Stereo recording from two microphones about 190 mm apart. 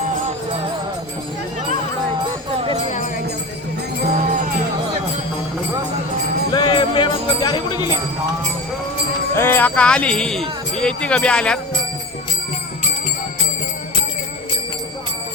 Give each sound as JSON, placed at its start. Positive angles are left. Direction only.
{"t": 4.0, "sound": "music", "side_deg": -45}
{"t": 6.5, "sound": "jingle bell", "side_deg": 25}
{"t": 9.3, "sound": "speech", "side_deg": 10}